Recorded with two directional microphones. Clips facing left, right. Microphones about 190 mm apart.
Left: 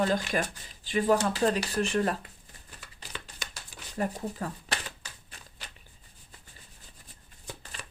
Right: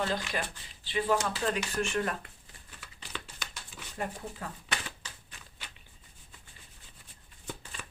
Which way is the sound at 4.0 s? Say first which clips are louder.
Left 6 dB; 40° left (ahead or behind).